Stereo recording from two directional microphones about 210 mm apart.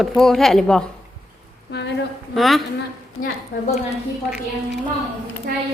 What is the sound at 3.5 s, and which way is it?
Speech, 40° left (ahead or behind).